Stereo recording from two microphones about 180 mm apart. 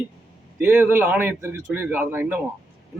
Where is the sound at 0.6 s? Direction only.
10° right (ahead or behind).